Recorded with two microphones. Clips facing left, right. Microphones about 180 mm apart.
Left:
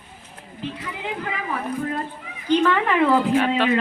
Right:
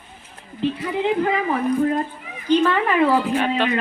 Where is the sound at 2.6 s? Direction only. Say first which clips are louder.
Right 1 dB; 15° right (ahead or behind).